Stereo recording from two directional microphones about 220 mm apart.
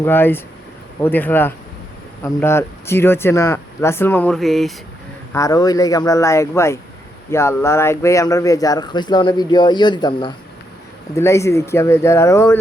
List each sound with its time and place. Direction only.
0.0 s speech: 10° left (ahead or behind)
5.3 s speech: 15° left (ahead or behind)